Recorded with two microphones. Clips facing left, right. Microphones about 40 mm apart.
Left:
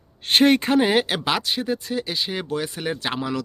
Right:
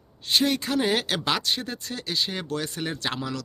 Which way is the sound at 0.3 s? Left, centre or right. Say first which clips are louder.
Left 7 dB; left.